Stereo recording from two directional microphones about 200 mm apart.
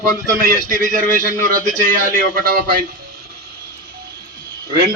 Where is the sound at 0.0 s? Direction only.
45° right (ahead or behind).